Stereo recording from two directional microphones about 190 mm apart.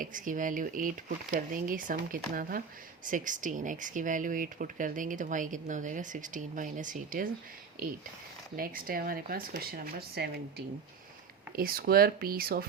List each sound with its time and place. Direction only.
0.0 s speech: 45° right (ahead or behind)
8.5 s speech: 50° right (ahead or behind)
11.5 s speech: 50° right (ahead or behind)